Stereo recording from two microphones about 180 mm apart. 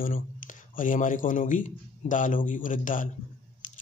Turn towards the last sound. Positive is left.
turn(degrees=45)  # may be behind; listen again after turning